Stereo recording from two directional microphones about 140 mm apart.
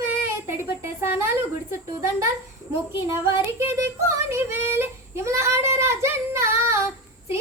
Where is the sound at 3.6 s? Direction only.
20° right (ahead or behind).